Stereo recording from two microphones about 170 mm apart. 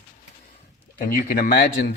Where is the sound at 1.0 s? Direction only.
55° left (ahead or behind).